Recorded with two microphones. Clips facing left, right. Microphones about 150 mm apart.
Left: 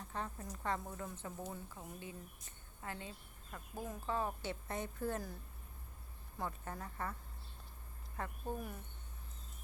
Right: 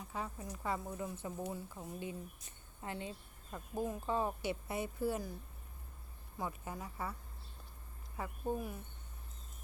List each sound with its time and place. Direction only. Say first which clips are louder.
0.0 s a woman's voice: right 1 dB; 5° right (ahead or behind)
6.4 s speech: right 1 dB; 5° right (ahead or behind)